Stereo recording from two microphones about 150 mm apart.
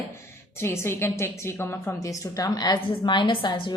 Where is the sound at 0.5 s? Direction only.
15° left (ahead or behind).